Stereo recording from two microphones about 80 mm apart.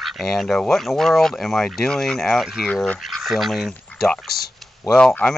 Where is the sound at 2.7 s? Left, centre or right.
Centre.